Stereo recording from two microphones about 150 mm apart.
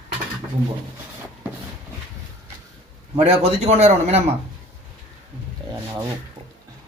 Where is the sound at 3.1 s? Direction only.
40° right (ahead or behind).